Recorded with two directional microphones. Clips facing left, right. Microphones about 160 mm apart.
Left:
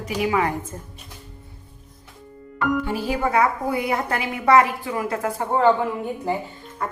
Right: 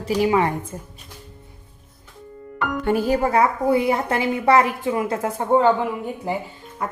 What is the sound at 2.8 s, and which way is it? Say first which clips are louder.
Speech: right 6 dB; 50° right (ahead or behind).